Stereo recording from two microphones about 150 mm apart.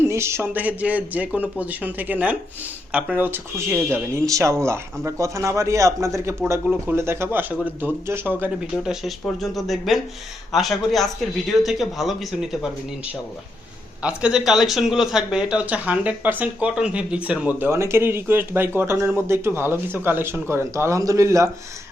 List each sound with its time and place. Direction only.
0.0 s speech: 15° right (ahead or behind)
8.4 s a man's voice: 5° right (ahead or behind)
14.0 s speech: 5° right (ahead or behind)